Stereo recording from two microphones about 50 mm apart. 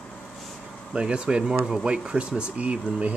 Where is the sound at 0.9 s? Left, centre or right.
Right.